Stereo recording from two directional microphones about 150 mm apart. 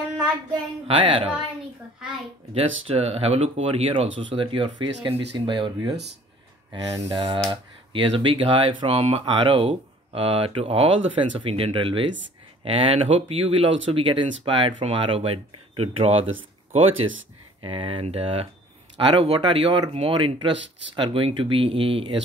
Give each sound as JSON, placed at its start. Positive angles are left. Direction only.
{"t": 0.8, "sound": "speech", "side_deg": -35}
{"t": 2.5, "sound": "speech", "side_deg": -40}
{"t": 6.7, "sound": "speech", "side_deg": -30}
{"t": 17.6, "sound": "speech", "side_deg": -35}